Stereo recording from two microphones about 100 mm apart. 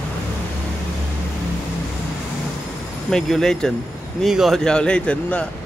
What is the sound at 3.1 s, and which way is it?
Speech, 5° left (ahead or behind).